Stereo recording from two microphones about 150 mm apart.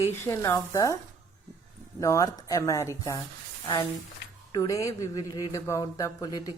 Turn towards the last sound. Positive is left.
turn(degrees=25)  # may be behind; listen again after turning